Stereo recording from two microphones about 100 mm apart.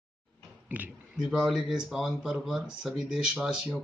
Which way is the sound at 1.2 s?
5° right (ahead or behind).